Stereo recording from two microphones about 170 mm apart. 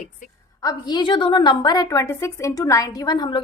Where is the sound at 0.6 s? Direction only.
25° left (ahead or behind).